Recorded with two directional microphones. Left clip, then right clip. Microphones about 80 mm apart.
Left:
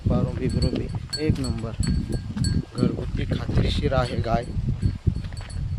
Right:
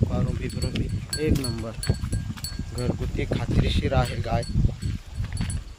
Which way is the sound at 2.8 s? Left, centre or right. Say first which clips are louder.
Left 1 dB; centre.